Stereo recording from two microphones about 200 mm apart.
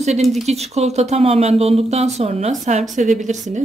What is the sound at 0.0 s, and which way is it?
Speech, 35° right (ahead or behind).